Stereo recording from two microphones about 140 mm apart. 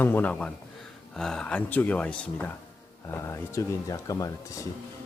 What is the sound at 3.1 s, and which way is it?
Speech, 20° left (ahead or behind).